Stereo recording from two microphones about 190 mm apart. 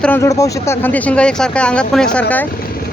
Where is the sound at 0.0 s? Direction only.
10° left (ahead or behind).